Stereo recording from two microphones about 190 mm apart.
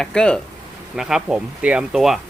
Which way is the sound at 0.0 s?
5° left (ahead or behind).